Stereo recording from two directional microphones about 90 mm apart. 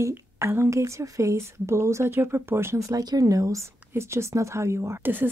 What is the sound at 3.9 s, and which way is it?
A woman's voice, 30° right (ahead or behind).